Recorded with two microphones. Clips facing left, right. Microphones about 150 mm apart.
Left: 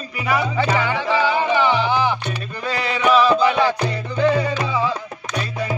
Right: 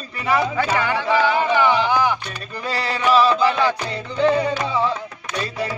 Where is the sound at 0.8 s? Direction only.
15° left (ahead or behind).